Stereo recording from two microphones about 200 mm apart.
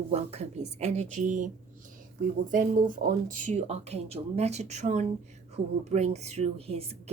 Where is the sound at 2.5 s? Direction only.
40° right (ahead or behind).